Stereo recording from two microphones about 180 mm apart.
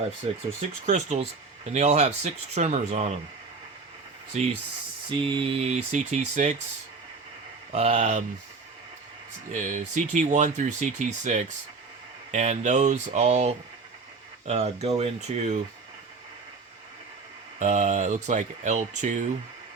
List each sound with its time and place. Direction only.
0.2 s speech: 35° right (ahead or behind)
4.3 s speech: 40° right (ahead or behind)
5.0 s speech: 25° right (ahead or behind)
7.7 s speech: 35° right (ahead or behind)
9.5 s speech: 45° right (ahead or behind)
17.6 s speech: 40° right (ahead or behind)